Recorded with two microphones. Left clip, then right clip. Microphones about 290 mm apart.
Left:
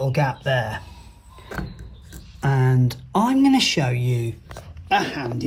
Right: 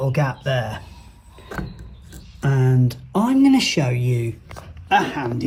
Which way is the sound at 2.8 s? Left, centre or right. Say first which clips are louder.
Left 1 dB; centre.